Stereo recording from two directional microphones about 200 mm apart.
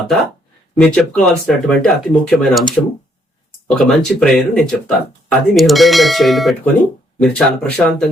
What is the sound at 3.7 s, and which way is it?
Speech, centre (ahead or behind).